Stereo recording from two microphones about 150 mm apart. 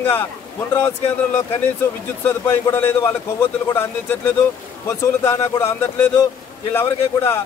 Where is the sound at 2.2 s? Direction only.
15° left (ahead or behind).